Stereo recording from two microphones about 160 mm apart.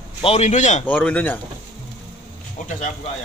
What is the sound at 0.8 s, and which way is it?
Speech, 10° left (ahead or behind).